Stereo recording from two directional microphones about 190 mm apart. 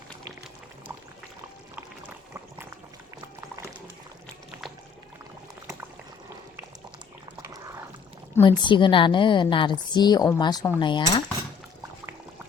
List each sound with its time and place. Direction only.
1.7 s pour: 10° right (ahead or behind)
3.4 s boiling: 15° right (ahead or behind)
8.4 s a woman's voice: 25° left (ahead or behind)